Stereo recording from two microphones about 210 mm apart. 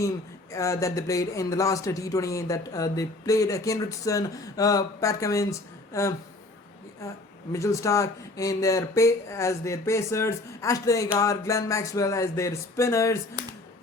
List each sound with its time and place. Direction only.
0.5 s speech: 15° left (ahead or behind)
7.5 s speech: 15° left (ahead or behind)